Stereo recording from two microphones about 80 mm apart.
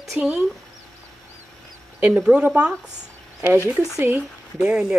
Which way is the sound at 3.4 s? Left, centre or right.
Left.